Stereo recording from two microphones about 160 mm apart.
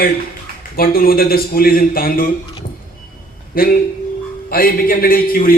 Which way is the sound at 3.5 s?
65° left (ahead or behind).